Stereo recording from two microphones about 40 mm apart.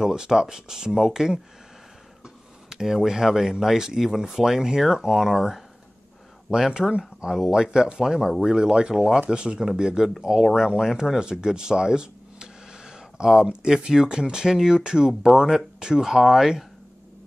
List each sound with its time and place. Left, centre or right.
0.0 s speech: centre
11.1 s speech: centre